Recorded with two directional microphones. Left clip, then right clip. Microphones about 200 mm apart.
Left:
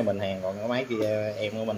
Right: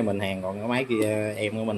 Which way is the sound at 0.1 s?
20° right (ahead or behind).